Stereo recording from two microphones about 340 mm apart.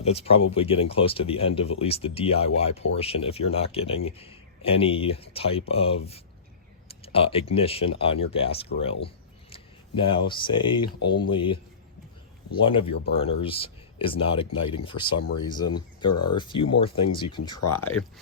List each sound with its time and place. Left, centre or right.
0.0 s speech: centre
12.5 s speech: centre
16.3 s speech: centre